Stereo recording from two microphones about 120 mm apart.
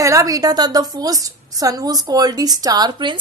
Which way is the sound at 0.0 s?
25° right (ahead or behind).